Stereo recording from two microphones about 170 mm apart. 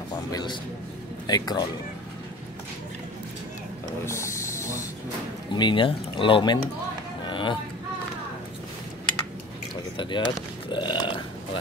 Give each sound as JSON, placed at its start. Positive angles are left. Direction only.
{"t": 0.1, "sound": "a man's voice", "side_deg": 25}
{"t": 4.0, "sound": "a sound", "side_deg": 15}
{"t": 5.5, "sound": "speech", "side_deg": 25}
{"t": 7.2, "sound": "chatter", "side_deg": 30}
{"t": 9.9, "sound": "speech", "side_deg": 30}